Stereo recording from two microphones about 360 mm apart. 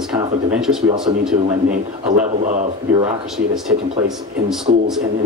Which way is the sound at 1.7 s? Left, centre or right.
Right.